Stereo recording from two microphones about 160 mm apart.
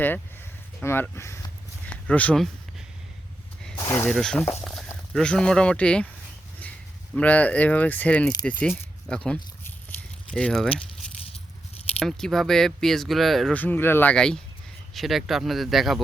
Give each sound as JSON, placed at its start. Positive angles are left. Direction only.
{"t": 0.8, "sound": "speech", "side_deg": 15}
{"t": 3.8, "sound": "speech", "side_deg": 20}
{"t": 4.1, "sound": "speech", "side_deg": 5}
{"t": 7.1, "sound": "speech", "side_deg": 10}
{"t": 11.9, "sound": "speech", "side_deg": 5}